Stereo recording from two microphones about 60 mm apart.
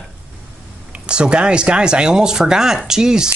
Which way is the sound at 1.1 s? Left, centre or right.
Centre.